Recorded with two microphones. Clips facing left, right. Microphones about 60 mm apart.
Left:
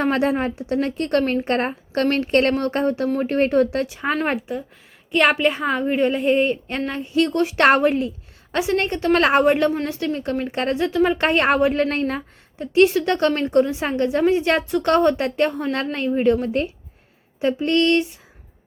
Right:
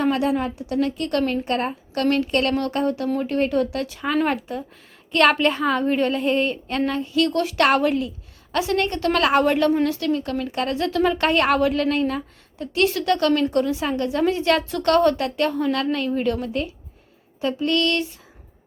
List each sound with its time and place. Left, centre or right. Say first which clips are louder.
0.0 s a woman's voice: left 1 dB; left
5.1 s a woman's voice: even; centre; by 12.2 s left
12.5 s a woman's voice: left 5 dB; left